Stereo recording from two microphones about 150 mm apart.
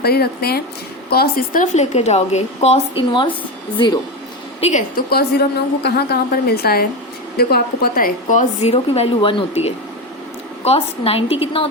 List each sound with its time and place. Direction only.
0.0 s a woman's voice: 90° left
1.7 s speech: 50° left (ahead or behind); by 3.2 s 35° left (ahead or behind)
4.6 s speech: 45° left (ahead or behind)
4.9 s a woman's voice: 90° left; by 8.7 s 55° left (ahead or behind)
8.7 s a woman's voice: 40° left (ahead or behind)